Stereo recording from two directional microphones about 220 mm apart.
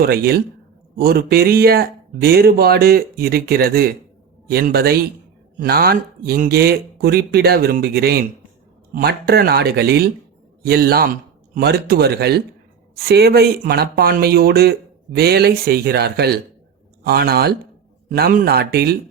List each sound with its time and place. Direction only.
0.0 s speech: 45° right (ahead or behind)